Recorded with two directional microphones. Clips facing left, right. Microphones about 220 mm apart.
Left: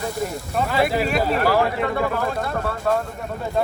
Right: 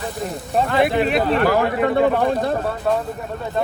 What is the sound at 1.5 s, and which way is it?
Speech, 50° right (ahead or behind).